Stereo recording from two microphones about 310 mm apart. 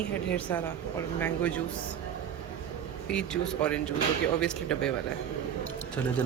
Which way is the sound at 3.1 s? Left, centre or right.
Centre.